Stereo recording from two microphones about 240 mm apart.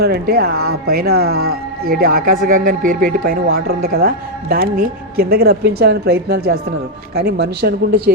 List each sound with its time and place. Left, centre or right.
0.0 s speech: right
0.5 s speech: right
0.9 s speech: right